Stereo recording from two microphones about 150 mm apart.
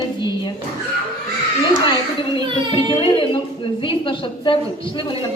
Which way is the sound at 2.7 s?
40° left (ahead or behind).